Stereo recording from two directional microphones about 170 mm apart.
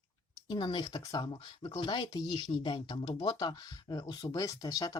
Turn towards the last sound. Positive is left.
turn(degrees=25)  # may be behind; listen again after turning